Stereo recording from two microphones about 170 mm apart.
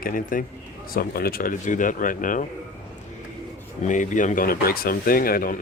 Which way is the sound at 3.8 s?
45° left (ahead or behind).